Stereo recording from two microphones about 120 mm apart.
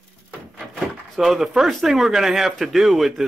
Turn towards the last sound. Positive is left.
turn(degrees=0)  # may be behind; listen again after turning